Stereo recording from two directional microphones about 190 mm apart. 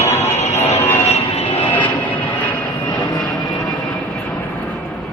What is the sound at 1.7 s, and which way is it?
Vehicle, 10° left (ahead or behind).